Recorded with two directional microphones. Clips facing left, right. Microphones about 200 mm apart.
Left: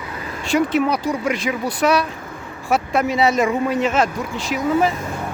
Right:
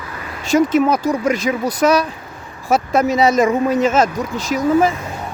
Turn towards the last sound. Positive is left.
turn(degrees=-40)  # may be behind; listen again after turning